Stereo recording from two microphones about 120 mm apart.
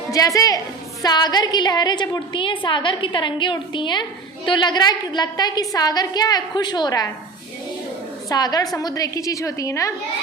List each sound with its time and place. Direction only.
0.1 s a woman's voice: 30° left (ahead or behind)
8.3 s a woman's voice: 35° left (ahead or behind)